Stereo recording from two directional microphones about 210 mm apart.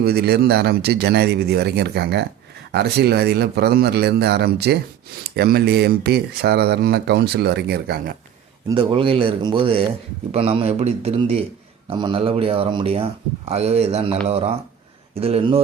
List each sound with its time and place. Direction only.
0.0 s speech: 50° right (ahead or behind)
8.6 s speech: 25° right (ahead or behind)